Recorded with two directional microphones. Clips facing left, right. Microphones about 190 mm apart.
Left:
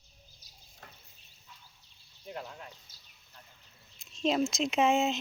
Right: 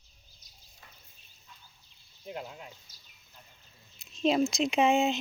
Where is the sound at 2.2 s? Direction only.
15° right (ahead or behind).